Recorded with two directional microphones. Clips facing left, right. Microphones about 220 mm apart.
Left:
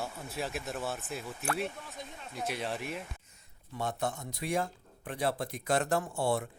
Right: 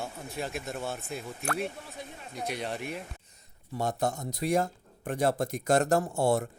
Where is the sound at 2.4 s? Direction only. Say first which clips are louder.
Right 1 dB; centre (ahead or behind).